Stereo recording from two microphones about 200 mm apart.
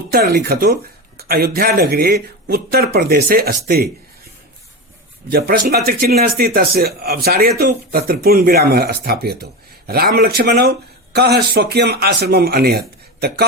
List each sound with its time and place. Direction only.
0.1 s speech: 50° right (ahead or behind)
5.3 s speech: 50° right (ahead or behind)